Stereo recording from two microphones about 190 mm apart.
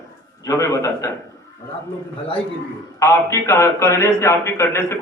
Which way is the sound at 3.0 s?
15° left (ahead or behind).